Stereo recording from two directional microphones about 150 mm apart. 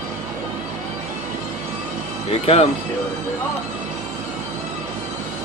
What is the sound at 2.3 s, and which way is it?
Speech, 40° left (ahead or behind).